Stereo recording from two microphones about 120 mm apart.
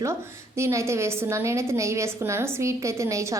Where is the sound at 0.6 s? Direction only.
25° right (ahead or behind).